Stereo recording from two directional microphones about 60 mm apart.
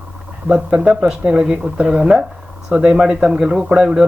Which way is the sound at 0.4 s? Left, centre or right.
Centre.